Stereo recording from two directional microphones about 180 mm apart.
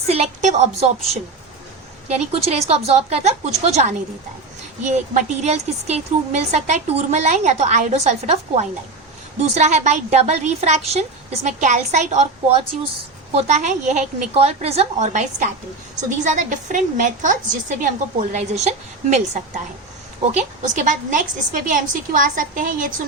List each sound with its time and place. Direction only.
0.1 s a sound: 40° right (ahead or behind)
2.0 s a woman's voice: 35° right (ahead or behind)
20.6 s a woman's voice: 45° right (ahead or behind)